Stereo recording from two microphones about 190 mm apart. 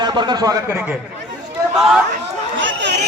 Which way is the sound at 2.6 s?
70° right (ahead or behind).